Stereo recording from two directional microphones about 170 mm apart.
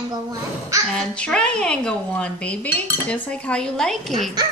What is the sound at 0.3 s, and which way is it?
Babbling, 20° right (ahead or behind).